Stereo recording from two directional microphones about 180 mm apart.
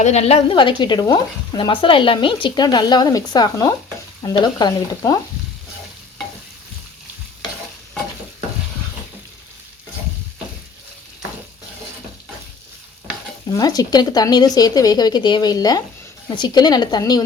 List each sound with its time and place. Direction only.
0.0 s speech: 35° left (ahead or behind); by 5.2 s 15° left (ahead or behind)
13.5 s speech: 20° left (ahead or behind)